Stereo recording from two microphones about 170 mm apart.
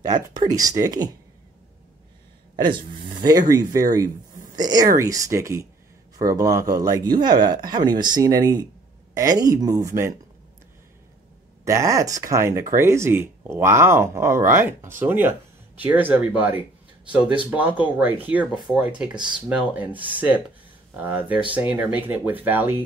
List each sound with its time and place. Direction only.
0.0 s speech: 25° right (ahead or behind)
2.7 s speech: 25° right (ahead or behind)
11.6 s speech: 20° right (ahead or behind)